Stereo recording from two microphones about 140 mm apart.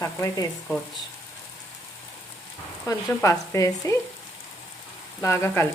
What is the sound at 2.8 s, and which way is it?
Speech, 20° left (ahead or behind).